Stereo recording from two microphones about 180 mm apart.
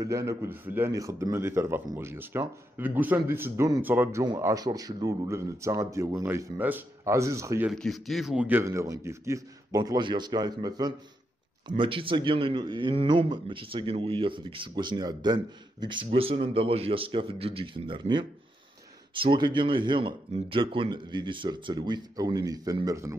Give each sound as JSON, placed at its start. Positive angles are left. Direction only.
{"t": 0.0, "sound": "a man's voice", "side_deg": -20}
{"t": 7.7, "sound": "a man's voice", "side_deg": 0}